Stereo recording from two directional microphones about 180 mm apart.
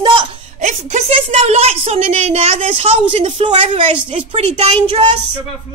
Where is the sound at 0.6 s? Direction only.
40° right (ahead or behind).